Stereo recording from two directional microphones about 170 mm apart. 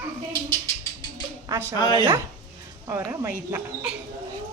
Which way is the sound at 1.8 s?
25° left (ahead or behind).